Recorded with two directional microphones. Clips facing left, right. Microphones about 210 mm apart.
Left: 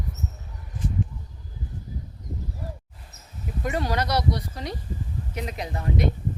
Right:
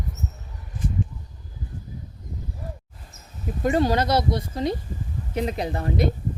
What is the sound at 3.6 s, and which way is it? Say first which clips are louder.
A woman's voice: right 6 dB; 30° right (ahead or behind).